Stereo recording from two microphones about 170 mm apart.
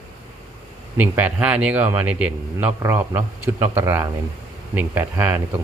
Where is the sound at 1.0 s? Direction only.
10° right (ahead or behind).